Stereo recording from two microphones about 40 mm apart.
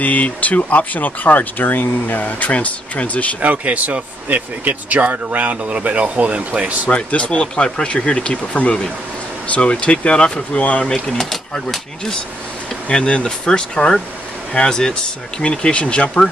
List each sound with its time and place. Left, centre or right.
0.0 s speech: left
3.3 s speech: right
6.9 s speech: left
10.8 s speech: centre
12.8 s speech: left